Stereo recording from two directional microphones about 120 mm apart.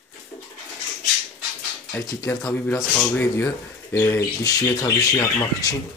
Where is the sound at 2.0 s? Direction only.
20° left (ahead or behind).